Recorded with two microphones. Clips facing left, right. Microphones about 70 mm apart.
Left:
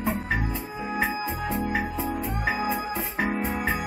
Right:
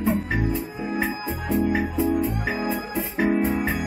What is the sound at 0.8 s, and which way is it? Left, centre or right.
Music, left.